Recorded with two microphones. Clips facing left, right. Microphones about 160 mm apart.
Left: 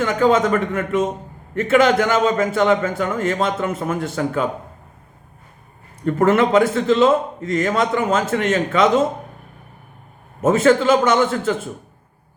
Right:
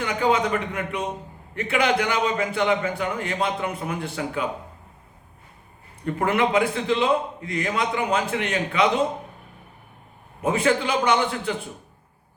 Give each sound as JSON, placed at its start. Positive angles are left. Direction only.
{"t": 0.0, "sound": "a man's voice", "side_deg": 45}
{"t": 6.1, "sound": "a man's voice", "side_deg": 45}
{"t": 10.4, "sound": "a man's voice", "side_deg": 45}